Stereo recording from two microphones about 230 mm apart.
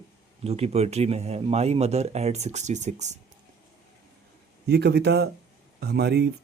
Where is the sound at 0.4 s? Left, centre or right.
Right.